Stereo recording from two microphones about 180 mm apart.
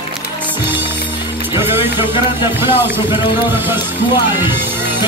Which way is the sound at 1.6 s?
10° right (ahead or behind).